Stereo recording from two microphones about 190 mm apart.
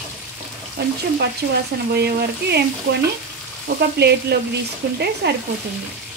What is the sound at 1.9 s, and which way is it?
Frying, 60° right (ahead or behind).